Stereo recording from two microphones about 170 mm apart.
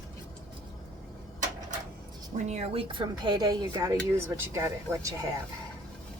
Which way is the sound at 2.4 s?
40° right (ahead or behind).